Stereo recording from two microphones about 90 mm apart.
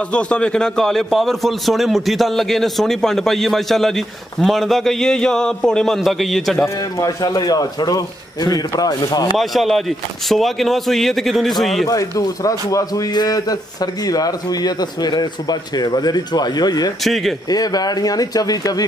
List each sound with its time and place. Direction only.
0.1 s a man's voice: 10° left (ahead or behind)
7.2 s a man's voice: 45° left (ahead or behind)
9.4 s a man's voice: centre (ahead or behind)
11.9 s a man's voice: 40° left (ahead or behind)
17.0 s a man's voice: centre (ahead or behind)
17.5 s a man's voice: 45° left (ahead or behind)